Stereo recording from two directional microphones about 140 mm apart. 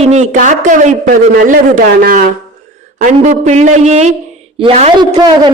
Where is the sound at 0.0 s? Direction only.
55° right (ahead or behind); by 2.3 s 90° right.